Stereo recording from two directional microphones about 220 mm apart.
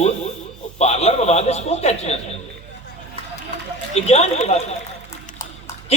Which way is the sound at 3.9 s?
30° left (ahead or behind).